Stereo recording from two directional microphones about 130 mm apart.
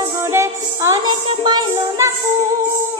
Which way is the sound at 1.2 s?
35° right (ahead or behind).